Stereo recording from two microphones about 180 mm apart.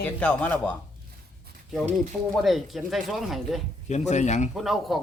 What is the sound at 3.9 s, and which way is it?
Speech, 40° left (ahead or behind).